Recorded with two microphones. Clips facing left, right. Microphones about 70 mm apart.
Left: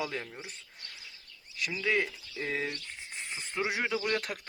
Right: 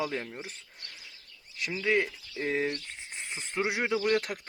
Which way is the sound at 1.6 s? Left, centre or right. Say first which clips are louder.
Right 2 dB; right.